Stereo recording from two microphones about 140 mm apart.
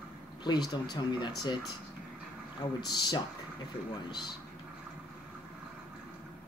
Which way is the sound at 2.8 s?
30° left (ahead or behind).